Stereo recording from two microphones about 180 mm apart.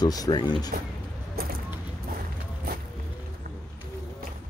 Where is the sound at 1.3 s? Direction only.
60° right (ahead or behind).